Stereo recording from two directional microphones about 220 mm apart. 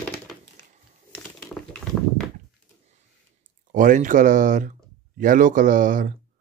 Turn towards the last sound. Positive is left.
turn(degrees=-35)  # may be behind; listen again after turning